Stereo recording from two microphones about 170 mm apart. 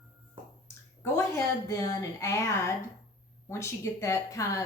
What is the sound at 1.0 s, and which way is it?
Speech, 15° left (ahead or behind).